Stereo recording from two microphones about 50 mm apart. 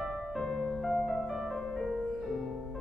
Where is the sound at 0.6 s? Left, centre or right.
Centre.